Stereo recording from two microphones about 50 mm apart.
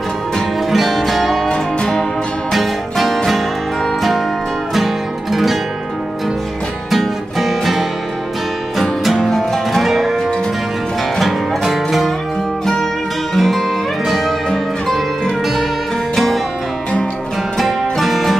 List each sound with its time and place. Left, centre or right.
0.7 s music: centre
1.5 s music: centre
2.5 s music: centre
4.7 s music: centre
6.9 s music: centre
9.0 s music: centre
11.1 s music: centre
13.3 s music: centre
17.6 s music: centre